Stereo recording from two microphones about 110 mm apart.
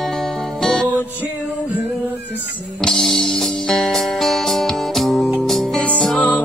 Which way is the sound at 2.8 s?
5° left (ahead or behind).